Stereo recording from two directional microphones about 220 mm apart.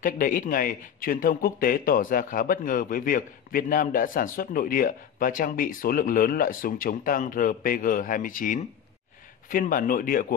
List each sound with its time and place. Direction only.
0.0 s speech: 35° left (ahead or behind)